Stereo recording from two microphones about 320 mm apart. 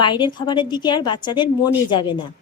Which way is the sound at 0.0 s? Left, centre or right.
Centre.